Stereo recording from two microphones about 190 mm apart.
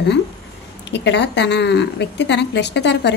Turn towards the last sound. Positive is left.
turn(degrees=65)  # may be behind; listen again after turning